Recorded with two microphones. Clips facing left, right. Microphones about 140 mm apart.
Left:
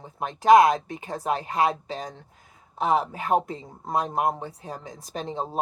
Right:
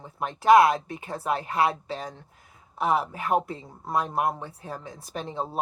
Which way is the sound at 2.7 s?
20° left (ahead or behind).